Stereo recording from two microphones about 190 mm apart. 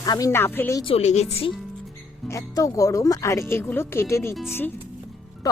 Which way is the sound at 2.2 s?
15° left (ahead or behind).